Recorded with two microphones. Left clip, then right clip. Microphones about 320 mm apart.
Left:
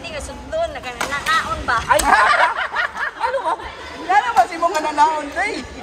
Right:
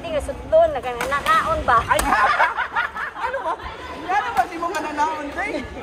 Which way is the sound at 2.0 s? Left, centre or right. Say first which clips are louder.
Left 4 dB; left.